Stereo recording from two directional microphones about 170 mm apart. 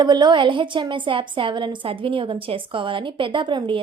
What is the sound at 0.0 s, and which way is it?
A woman's voice, 25° right (ahead or behind).